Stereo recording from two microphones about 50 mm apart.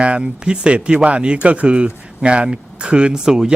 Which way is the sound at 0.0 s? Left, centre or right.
Right.